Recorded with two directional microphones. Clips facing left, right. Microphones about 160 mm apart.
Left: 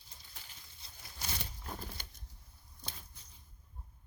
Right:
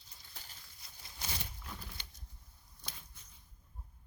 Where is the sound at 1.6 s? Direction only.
45° left (ahead or behind).